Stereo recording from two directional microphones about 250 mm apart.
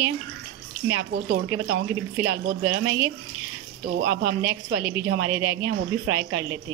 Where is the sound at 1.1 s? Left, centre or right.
Right.